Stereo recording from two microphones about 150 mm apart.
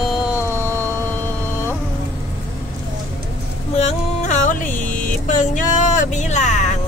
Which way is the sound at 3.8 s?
55° left (ahead or behind).